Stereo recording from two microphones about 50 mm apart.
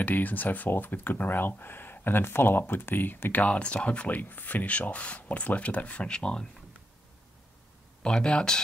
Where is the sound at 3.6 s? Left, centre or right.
Left.